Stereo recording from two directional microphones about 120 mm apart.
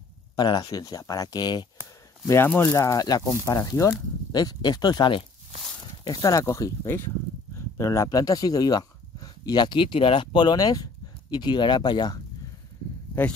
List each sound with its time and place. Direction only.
0.4 s speech: 35° left (ahead or behind)
2.2 s speech: 20° left (ahead or behind); by 10.6 s 45° left (ahead or behind)
10.6 s speech: 30° left (ahead or behind)